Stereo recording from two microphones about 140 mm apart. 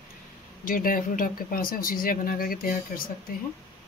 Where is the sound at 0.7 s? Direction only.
80° left.